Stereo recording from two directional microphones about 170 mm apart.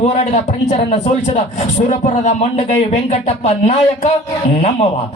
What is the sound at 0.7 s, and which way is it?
Speech, 40° left (ahead or behind).